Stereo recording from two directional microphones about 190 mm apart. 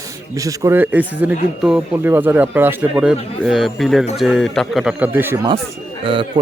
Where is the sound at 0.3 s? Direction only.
15° right (ahead or behind).